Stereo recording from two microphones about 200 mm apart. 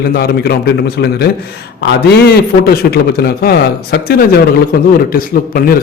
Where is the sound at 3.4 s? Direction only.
50° left (ahead or behind).